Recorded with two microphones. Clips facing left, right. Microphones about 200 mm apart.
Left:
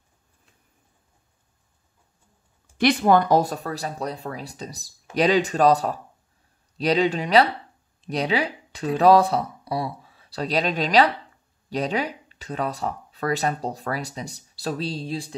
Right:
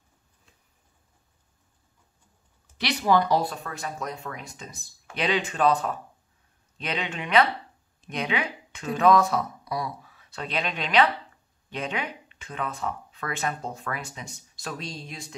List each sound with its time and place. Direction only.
2.8 s speech: 50° left (ahead or behind); by 15.3 s 30° left (ahead or behind)